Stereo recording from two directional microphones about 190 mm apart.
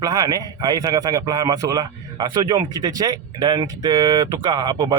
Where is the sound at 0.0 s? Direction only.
20° right (ahead or behind).